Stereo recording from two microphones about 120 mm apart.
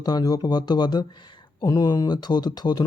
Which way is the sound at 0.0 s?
35° left (ahead or behind).